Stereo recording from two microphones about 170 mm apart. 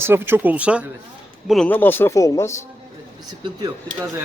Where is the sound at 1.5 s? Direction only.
5° left (ahead or behind).